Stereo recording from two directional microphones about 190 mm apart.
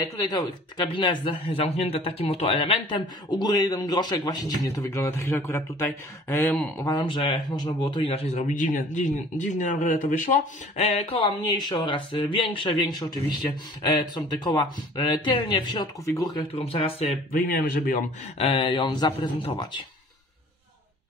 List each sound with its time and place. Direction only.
0.0 s speech: 20° left (ahead or behind)
7.1 s speech: 25° left (ahead or behind)
17.5 s speech: 45° left (ahead or behind)
18.5 s speech: 25° left (ahead or behind)